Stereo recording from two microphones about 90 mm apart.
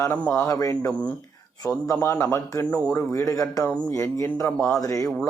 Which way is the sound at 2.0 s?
30° left (ahead or behind).